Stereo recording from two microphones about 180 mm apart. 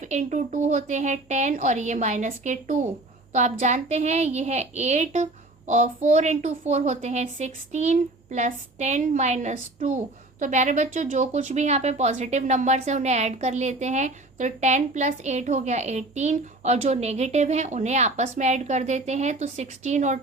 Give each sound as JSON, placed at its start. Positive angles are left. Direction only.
{"t": 0.0, "sound": "a woman's voice", "side_deg": -40}